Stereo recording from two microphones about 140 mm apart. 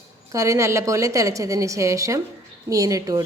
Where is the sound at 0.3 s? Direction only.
20° right (ahead or behind).